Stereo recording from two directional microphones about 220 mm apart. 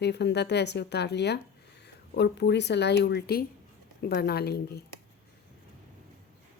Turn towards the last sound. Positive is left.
turn(degrees=45)  # may be behind; listen again after turning